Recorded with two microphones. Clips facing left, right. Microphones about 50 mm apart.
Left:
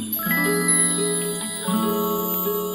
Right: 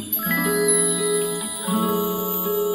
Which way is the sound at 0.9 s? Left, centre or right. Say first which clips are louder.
Right 2 dB; centre.